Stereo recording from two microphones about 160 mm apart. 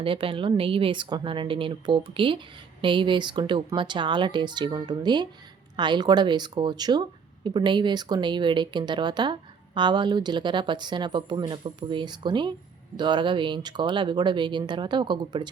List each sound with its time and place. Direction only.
0.0 s speech: 35° right (ahead or behind)